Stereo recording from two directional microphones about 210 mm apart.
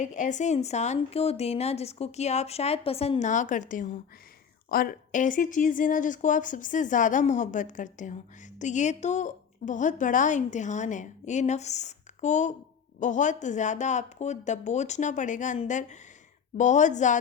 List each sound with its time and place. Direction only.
0.0 s speech: 35° left (ahead or behind)